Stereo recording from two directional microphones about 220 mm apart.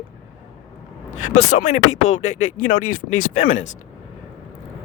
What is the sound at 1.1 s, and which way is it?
Speech, 35° left (ahead or behind).